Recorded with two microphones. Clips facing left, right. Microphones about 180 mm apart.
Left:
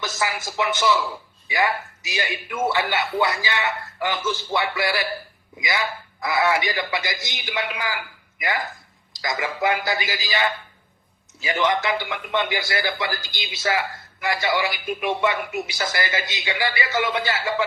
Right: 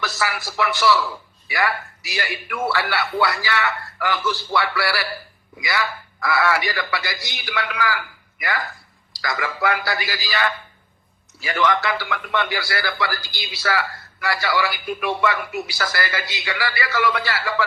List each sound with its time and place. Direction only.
0.0 s speech: 20° left (ahead or behind)